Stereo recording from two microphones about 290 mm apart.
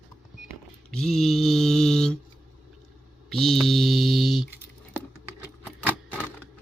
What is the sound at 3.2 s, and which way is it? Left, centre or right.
Mantra, centre.